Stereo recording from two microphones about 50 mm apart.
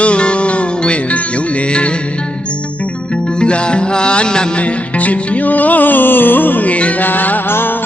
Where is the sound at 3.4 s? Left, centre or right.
Centre.